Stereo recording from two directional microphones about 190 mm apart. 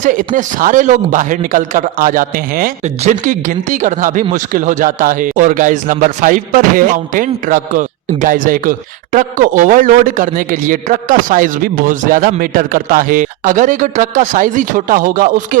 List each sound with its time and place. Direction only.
0.0 s a man's voice: 45° right (ahead or behind)